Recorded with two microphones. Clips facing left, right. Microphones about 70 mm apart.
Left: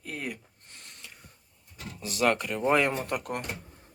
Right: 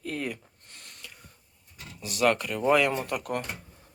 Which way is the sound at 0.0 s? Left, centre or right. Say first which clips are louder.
Right 4 dB; centre.